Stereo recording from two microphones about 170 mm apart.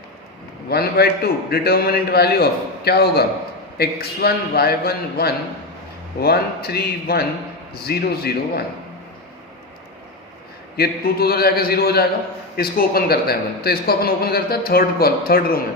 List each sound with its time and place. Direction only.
0.7 s a man's voice: 65° left (ahead or behind)
10.8 s speech: 65° left (ahead or behind)